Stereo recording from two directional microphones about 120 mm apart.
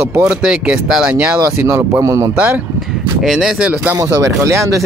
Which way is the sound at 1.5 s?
20° right (ahead or behind).